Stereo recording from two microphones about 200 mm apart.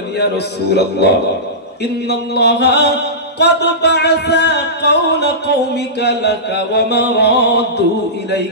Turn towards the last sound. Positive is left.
turn(degrees=55)  # may be behind; listen again after turning